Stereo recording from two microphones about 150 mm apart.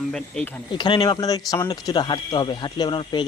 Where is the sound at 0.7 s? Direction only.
30° left (ahead or behind).